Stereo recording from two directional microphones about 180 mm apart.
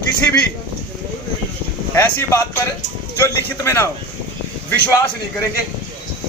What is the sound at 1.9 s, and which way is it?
A man's voice, 15° left (ahead or behind).